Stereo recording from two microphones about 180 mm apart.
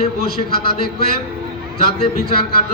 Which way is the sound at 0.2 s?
60° left (ahead or behind).